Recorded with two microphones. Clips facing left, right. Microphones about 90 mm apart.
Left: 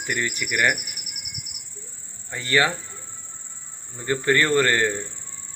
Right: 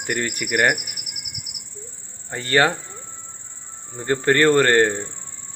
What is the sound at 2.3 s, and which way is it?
Speech, 40° right (ahead or behind).